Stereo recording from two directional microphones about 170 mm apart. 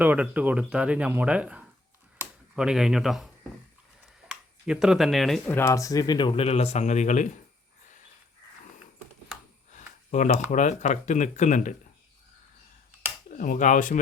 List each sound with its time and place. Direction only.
0.0 s speech: 10° right (ahead or behind)
2.1 s finger snapping: 5° right (ahead or behind)
4.3 s speech: 5° right (ahead or behind)
5.5 s speech: 15° left (ahead or behind); by 7.3 s 45° left (ahead or behind)
10.1 s speech: 45° left (ahead or behind)
13.3 s speech: 50° left (ahead or behind)